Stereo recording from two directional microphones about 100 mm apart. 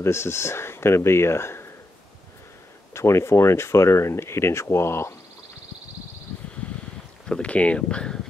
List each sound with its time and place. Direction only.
0.0 s speech: 25° left (ahead or behind)
2.9 s speech: 30° left (ahead or behind)
7.2 s speech: 10° left (ahead or behind)